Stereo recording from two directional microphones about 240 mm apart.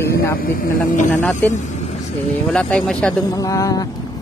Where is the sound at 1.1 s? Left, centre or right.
Centre.